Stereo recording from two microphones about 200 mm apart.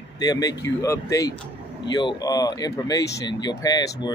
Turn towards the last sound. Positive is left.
turn(degrees=15)  # may be behind; listen again after turning